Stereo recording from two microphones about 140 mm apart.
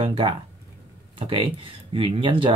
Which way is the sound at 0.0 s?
40° right (ahead or behind).